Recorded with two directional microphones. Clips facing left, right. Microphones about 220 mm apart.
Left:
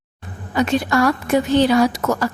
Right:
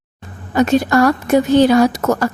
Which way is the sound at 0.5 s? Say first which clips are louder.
Right 5 dB; 40° right (ahead or behind).